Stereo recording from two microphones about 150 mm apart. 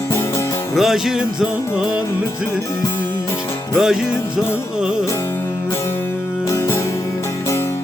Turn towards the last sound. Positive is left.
turn(degrees=20)  # may be behind; listen again after turning